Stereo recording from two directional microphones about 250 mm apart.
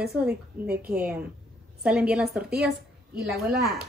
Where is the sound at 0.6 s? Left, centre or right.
Right.